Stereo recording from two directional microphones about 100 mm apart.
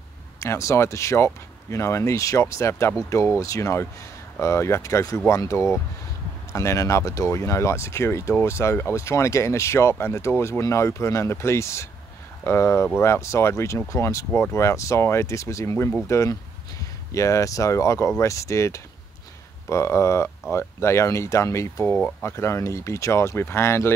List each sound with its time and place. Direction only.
0.4 s speech: 30° left (ahead or behind)